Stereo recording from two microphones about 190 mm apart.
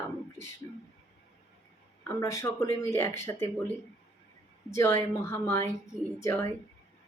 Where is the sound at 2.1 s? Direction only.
15° left (ahead or behind).